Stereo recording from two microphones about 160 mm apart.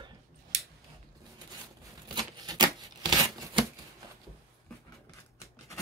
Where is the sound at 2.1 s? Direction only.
25° right (ahead or behind).